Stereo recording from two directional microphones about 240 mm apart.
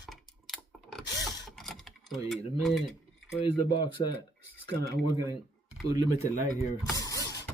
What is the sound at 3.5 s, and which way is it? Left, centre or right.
Speech, centre.